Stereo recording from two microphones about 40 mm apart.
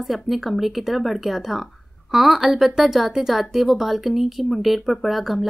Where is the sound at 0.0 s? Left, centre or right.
Centre.